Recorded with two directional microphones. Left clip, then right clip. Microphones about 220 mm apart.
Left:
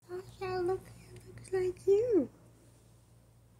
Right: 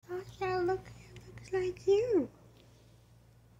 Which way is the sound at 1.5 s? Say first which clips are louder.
Even; 15° left (ahead or behind).